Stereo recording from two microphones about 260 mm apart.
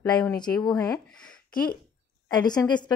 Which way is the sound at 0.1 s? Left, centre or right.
Centre.